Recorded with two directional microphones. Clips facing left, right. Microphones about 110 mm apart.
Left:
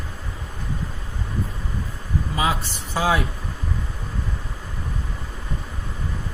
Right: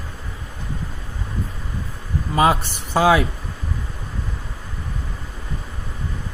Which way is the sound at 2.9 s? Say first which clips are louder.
Right 6 dB; 80° right.